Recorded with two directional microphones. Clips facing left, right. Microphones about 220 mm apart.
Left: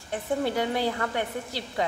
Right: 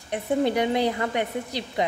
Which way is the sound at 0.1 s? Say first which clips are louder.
Right 4 dB; 20° right (ahead or behind).